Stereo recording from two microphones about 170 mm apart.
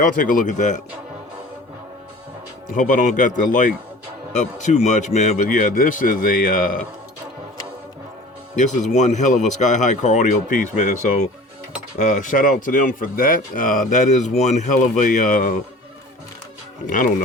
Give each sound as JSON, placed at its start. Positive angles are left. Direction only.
{"t": 0.0, "sound": "speech", "side_deg": 55}
{"t": 2.7, "sound": "speech", "side_deg": 50}
{"t": 8.5, "sound": "speech", "side_deg": 45}
{"t": 16.8, "sound": "speech", "side_deg": 50}